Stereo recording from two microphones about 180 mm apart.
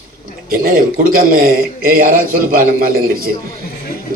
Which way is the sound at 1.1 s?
55° right (ahead or behind).